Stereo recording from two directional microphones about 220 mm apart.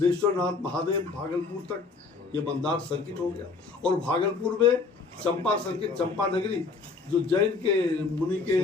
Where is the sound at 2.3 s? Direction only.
5° left (ahead or behind).